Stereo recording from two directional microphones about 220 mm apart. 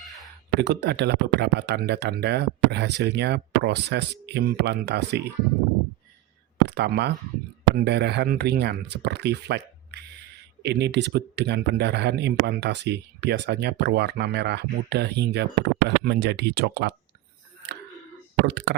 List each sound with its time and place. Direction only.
0.6 s speech: 50° right (ahead or behind)
6.7 s speech: 50° right (ahead or behind)
18.4 s speech: 50° right (ahead or behind)